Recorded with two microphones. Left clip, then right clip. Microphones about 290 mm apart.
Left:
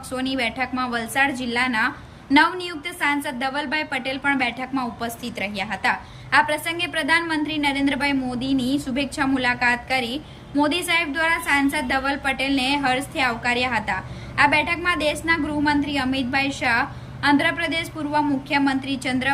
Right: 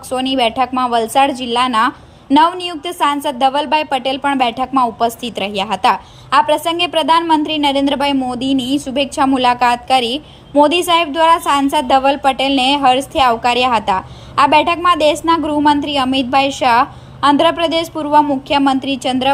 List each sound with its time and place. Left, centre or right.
0.2 s a woman's voice: centre